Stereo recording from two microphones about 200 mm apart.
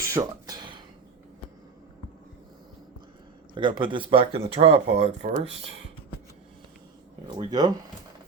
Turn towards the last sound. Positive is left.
turn(degrees=-20)  # may be behind; listen again after turning